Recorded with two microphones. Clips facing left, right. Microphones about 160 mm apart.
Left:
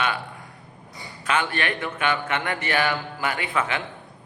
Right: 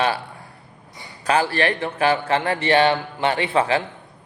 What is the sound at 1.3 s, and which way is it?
A man's voice, 35° right (ahead or behind).